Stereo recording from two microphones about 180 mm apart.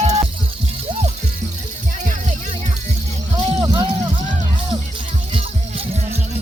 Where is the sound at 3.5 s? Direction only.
20° right (ahead or behind); by 6.2 s 35° right (ahead or behind).